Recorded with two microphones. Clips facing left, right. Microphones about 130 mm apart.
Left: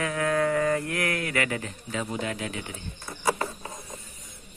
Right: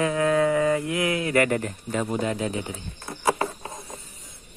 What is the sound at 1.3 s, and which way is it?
Speech, 45° right (ahead or behind).